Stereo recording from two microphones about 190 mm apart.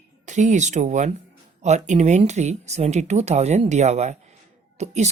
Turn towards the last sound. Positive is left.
turn(degrees=-35)  # may be behind; listen again after turning